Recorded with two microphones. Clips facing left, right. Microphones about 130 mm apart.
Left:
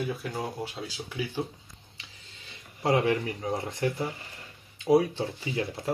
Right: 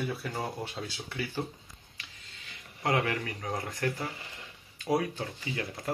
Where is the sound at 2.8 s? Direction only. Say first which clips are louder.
Left 5 dB; 25° left (ahead or behind).